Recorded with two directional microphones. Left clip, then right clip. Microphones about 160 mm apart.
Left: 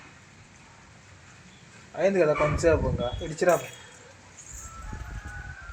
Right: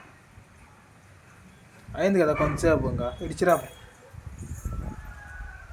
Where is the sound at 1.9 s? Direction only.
45° right (ahead or behind).